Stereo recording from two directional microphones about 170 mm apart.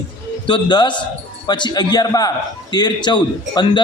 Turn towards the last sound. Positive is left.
turn(degrees=25)  # may be behind; listen again after turning